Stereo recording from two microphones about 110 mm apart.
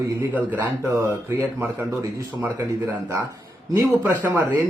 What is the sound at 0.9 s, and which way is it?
Speech, 25° right (ahead or behind).